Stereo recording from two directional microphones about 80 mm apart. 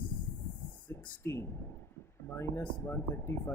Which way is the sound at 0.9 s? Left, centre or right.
Left.